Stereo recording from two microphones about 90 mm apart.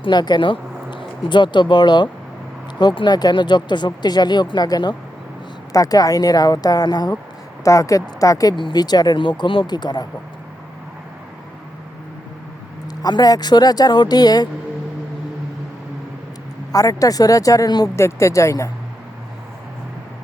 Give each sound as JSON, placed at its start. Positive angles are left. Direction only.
{"t": 0.0, "sound": "speech", "side_deg": 55}
{"t": 5.7, "sound": "speech", "side_deg": 40}
{"t": 7.6, "sound": "a woman's voice", "side_deg": 40}
{"t": 8.5, "sound": "speech", "side_deg": 55}
{"t": 13.0, "sound": "speech", "side_deg": 50}
{"t": 16.7, "sound": "a woman's voice", "side_deg": 40}
{"t": 17.9, "sound": "a woman's voice", "side_deg": 35}